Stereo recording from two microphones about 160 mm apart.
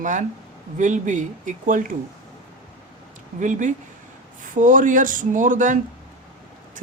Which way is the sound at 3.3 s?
50° right (ahead or behind).